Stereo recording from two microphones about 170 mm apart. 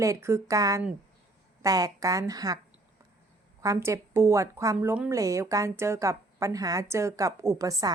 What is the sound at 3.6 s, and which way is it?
A woman's voice, 15° right (ahead or behind).